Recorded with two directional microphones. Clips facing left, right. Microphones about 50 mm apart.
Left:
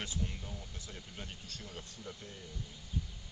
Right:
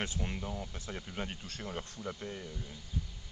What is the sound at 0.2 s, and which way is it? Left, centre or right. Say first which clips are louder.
Speech: right 5 dB; right.